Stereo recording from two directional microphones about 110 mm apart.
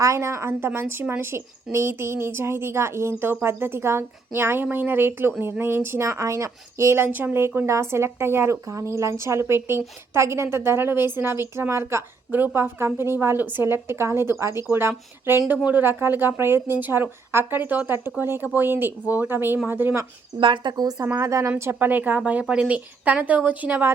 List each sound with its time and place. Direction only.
0.0 s speech: 30° right (ahead or behind)
20.4 s speech: 45° right (ahead or behind)
21.0 s a woman's voice: 25° right (ahead or behind)